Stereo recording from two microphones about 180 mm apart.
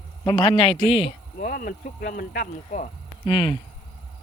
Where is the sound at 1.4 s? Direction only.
50° left (ahead or behind).